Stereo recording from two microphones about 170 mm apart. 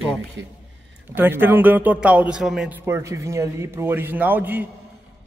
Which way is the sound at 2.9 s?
15° right (ahead or behind).